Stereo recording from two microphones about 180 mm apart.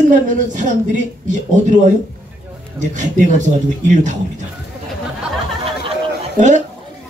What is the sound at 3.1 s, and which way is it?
Speech, 45° right (ahead or behind).